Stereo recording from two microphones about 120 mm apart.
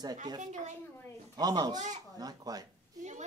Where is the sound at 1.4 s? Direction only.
35° right (ahead or behind).